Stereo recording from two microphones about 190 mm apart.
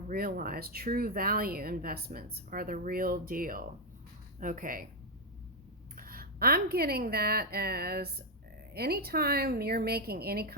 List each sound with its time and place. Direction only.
0.1 s speech: 50° right (ahead or behind)
6.0 s a woman's voice: 50° right (ahead or behind)